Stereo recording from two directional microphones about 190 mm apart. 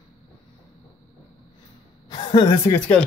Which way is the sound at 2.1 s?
25° left (ahead or behind).